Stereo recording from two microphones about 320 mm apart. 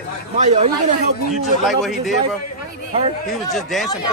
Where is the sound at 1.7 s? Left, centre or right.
Centre.